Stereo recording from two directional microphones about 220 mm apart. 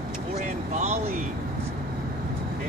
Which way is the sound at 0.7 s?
30° right (ahead or behind).